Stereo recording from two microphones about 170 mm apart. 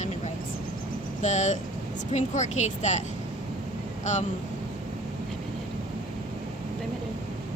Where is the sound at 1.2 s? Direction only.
45° left (ahead or behind).